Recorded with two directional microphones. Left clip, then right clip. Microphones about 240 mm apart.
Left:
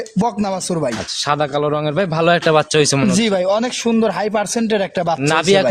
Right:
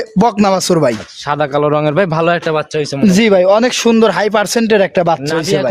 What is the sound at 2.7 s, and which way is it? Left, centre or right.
Speech, left.